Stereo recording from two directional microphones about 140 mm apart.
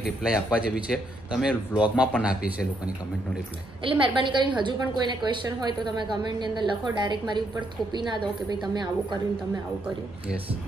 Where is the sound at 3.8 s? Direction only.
35° right (ahead or behind).